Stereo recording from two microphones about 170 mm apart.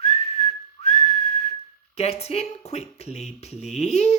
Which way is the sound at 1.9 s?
40° left (ahead or behind).